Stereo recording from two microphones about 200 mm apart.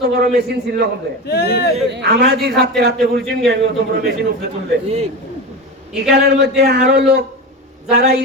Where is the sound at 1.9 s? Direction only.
55° right (ahead or behind).